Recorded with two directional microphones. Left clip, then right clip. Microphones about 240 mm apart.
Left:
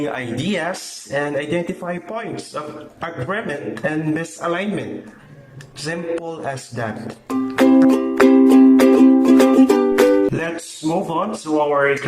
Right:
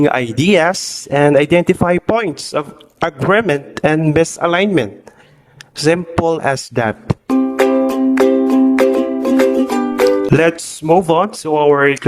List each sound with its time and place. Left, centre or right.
0.0 s speech: right
7.3 s music: centre
10.3 s speech: right